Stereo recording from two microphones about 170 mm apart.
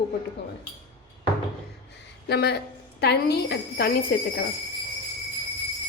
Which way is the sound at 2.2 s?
75° left (ahead or behind).